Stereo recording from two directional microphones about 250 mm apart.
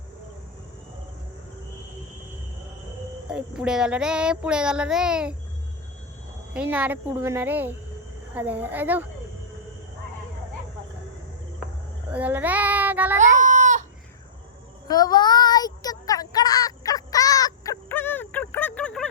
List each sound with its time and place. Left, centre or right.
3.2 s child singing: centre
6.5 s speech: centre
12.1 s child singing: centre
13.1 s a sound: right
14.8 s child singing: centre
16.3 s a sound: centre